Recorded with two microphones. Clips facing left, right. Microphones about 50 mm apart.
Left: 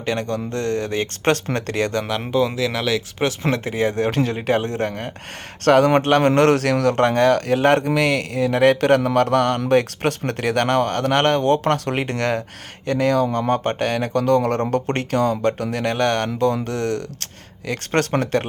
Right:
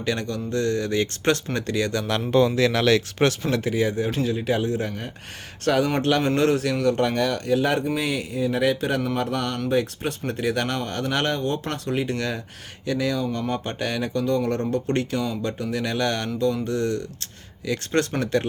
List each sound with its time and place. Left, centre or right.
0.0 s speech: left
2.6 s speech: centre
3.5 s speech: left
15.5 s speech: left
15.8 s speech: left